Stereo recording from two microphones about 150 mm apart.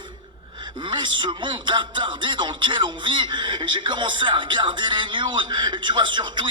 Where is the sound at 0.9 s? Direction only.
30° right (ahead or behind).